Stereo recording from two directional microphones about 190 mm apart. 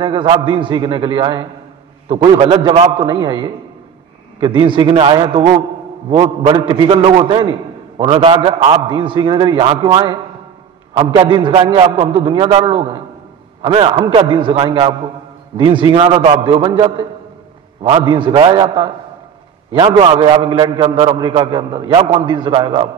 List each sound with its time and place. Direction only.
0.0 s a man's voice: 25° right (ahead or behind)